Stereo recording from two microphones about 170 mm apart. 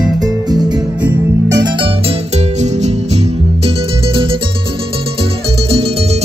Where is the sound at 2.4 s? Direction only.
40° right (ahead or behind).